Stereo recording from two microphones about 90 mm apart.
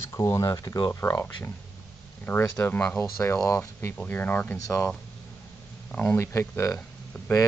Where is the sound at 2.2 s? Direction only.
20° left (ahead or behind).